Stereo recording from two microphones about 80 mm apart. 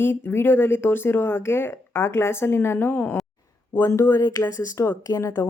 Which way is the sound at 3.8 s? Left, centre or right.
Left.